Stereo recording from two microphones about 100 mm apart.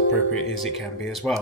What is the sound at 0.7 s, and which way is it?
Speech, centre (ahead or behind).